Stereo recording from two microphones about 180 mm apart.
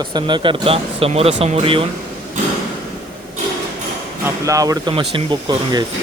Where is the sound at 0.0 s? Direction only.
25° right (ahead or behind).